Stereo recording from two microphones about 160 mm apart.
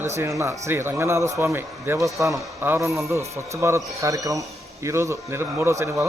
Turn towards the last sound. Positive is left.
turn(degrees=-15)  # may be behind; listen again after turning